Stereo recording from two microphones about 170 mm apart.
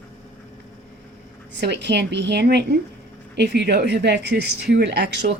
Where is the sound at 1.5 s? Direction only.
90° right.